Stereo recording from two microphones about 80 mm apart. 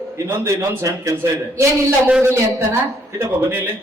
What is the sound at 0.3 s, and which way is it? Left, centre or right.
A man's voice, right.